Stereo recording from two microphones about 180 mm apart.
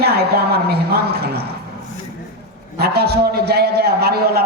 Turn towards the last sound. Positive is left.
turn(degrees=-60)  # may be behind; listen again after turning